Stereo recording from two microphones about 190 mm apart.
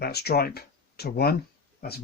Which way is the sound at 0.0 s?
55° left (ahead or behind).